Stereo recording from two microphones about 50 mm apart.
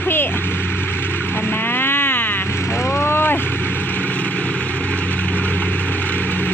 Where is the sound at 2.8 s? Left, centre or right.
Left.